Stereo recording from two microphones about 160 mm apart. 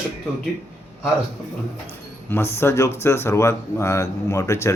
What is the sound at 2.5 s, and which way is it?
Speech, 15° left (ahead or behind).